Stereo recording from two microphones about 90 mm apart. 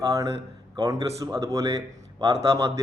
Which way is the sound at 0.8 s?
40° right (ahead or behind).